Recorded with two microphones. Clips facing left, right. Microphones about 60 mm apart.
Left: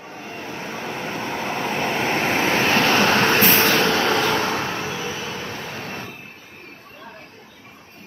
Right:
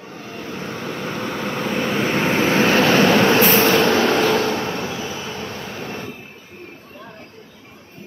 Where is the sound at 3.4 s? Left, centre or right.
Centre.